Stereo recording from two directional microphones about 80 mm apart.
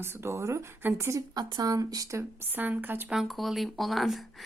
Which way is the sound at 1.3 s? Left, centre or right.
Right.